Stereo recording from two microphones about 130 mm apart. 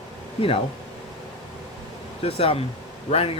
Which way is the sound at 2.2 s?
50° left (ahead or behind).